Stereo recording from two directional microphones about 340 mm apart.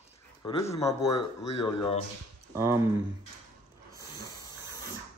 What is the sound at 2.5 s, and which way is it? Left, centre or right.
Speech, centre.